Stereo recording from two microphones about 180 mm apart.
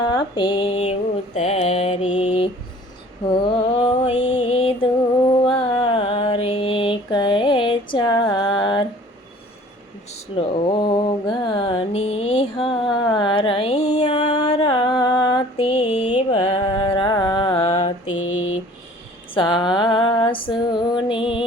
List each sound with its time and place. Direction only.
0.0 s mantra: 25° left (ahead or behind)
10.1 s a sound: 30° left (ahead or behind)
14.4 s mantra: 30° left (ahead or behind)
16.1 s music: 30° left (ahead or behind)
18.2 s mantra: 90° left
19.4 s female singing: 25° left (ahead or behind)